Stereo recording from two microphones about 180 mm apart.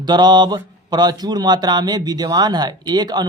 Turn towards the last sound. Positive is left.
turn(degrees=-25)  # may be behind; listen again after turning